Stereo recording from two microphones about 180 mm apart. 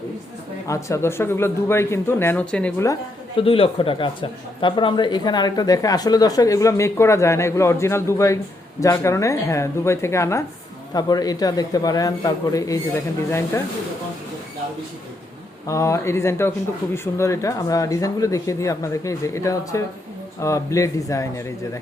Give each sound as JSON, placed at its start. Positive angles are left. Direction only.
{"t": 0.7, "sound": "speech", "side_deg": 15}
{"t": 3.3, "sound": "a man's voice", "side_deg": 30}
{"t": 15.6, "sound": "speech", "side_deg": 15}